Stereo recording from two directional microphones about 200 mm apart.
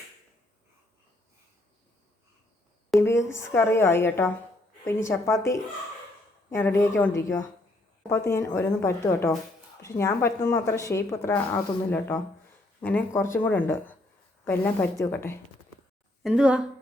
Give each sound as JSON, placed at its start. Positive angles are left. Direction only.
{"t": 2.9, "sound": "a woman's voice", "side_deg": 0}
{"t": 3.3, "sound": "speech", "side_deg": 15}
{"t": 16.2, "sound": "a woman's voice", "side_deg": -5}